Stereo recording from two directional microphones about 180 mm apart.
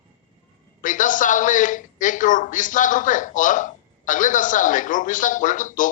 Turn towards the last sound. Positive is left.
turn(degrees=45)  # may be behind; listen again after turning